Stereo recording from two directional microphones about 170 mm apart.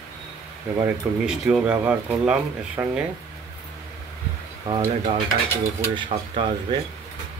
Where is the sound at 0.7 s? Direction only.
10° right (ahead or behind).